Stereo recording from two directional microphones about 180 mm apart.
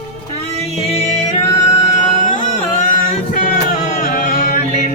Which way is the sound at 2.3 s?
45° left (ahead or behind).